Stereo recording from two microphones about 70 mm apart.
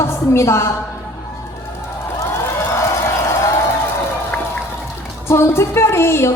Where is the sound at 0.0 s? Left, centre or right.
Left.